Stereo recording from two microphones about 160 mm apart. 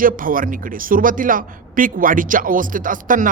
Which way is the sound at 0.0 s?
60° right (ahead or behind).